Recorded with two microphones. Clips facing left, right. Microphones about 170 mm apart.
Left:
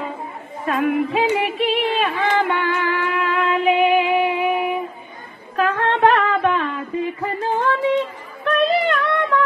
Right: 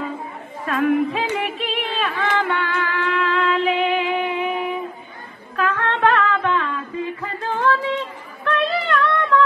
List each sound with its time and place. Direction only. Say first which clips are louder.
0.7 s music: even; 10° left (ahead or behind)
5.7 s humming: left 3 dB; 15° left (ahead or behind)
7.4 s a sound: left 1 dB; 15° left (ahead or behind)